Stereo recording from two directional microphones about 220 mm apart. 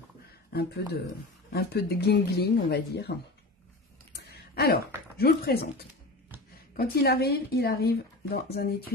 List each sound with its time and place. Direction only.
0.5 s speech: 45° left (ahead or behind)
4.1 s a sound: 45° left (ahead or behind)
6.8 s speech: 45° left (ahead or behind)